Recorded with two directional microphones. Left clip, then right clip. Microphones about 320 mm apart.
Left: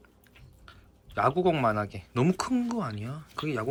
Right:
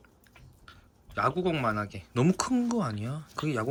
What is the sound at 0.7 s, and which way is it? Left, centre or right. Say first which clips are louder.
Speech: even; centre.